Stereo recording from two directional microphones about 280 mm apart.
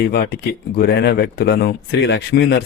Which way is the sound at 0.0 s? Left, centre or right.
Left.